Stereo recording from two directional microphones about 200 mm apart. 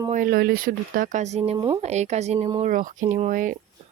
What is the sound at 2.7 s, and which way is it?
Speech, 40° right (ahead or behind).